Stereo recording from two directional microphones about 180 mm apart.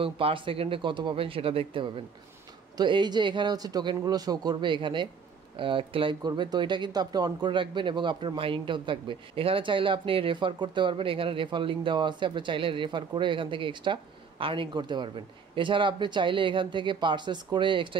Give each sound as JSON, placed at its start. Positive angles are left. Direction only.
{"t": 0.0, "sound": "speech", "side_deg": -30}